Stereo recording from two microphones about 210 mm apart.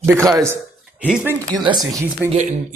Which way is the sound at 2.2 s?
5° right (ahead or behind).